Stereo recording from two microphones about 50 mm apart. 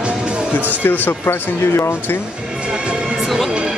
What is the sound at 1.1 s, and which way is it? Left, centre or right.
Speech, left.